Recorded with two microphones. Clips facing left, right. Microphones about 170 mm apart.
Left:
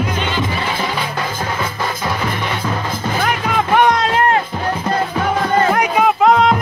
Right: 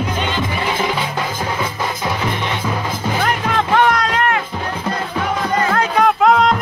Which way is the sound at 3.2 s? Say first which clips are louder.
Left 1 dB; 5° left (ahead or behind).